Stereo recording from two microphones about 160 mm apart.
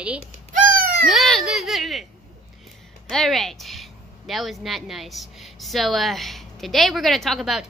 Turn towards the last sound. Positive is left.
turn(degrees=0)  # may be behind; listen again after turning